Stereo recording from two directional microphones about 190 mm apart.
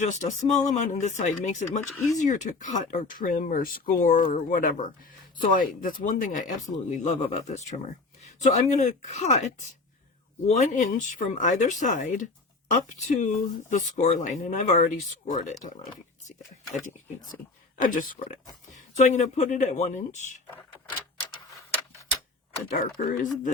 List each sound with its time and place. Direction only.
0.0 s speech: 40° left (ahead or behind)
17.7 s speech: 45° left (ahead or behind)
22.8 s speech: 45° left (ahead or behind)